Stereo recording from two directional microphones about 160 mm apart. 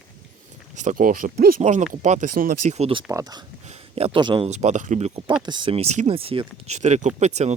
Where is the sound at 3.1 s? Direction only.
20° right (ahead or behind).